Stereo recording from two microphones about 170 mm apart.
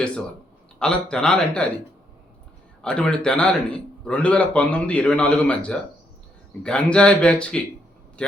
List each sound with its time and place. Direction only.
0.8 s a man's voice: 5° left (ahead or behind)
2.8 s a man's voice: 5° left (ahead or behind)